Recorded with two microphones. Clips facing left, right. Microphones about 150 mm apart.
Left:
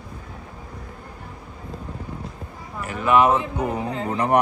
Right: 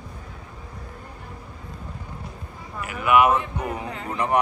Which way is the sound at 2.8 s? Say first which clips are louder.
Left 1 dB; 30° left (ahead or behind).